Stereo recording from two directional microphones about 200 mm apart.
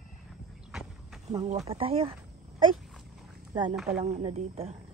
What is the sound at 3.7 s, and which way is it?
Speech, centre (ahead or behind).